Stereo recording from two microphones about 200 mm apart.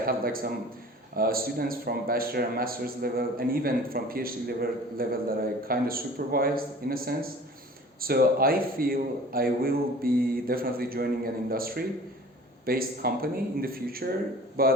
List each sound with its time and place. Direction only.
0.0 s speech: 45° right (ahead or behind)